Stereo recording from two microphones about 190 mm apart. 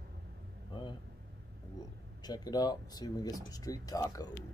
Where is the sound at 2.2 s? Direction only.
20° left (ahead or behind).